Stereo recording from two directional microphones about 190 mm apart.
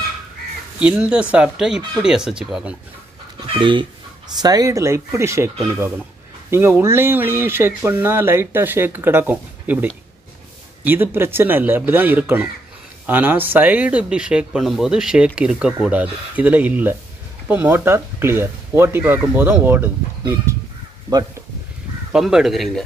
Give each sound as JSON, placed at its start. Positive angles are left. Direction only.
{"t": 0.7, "sound": "speech", "side_deg": -5}
{"t": 3.3, "sound": "speech", "side_deg": -25}
{"t": 6.5, "sound": "speech", "side_deg": -15}
{"t": 22.1, "sound": "speech", "side_deg": -5}